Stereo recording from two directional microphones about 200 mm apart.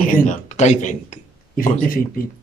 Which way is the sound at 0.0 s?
40° left (ahead or behind).